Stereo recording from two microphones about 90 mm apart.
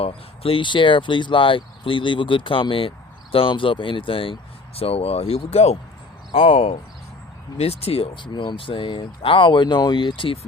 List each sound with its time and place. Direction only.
0.0 s speech: 90° left
7.8 s speech: 90° left; by 10.3 s 65° left (ahead or behind)